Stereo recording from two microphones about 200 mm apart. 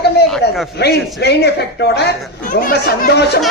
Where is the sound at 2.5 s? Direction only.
45° left (ahead or behind).